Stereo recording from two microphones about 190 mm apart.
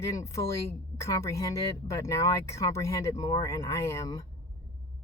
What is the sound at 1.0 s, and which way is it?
Speech, 15° left (ahead or behind).